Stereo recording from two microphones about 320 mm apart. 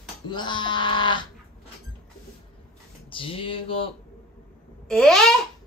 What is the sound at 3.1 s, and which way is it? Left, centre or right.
Speech, centre.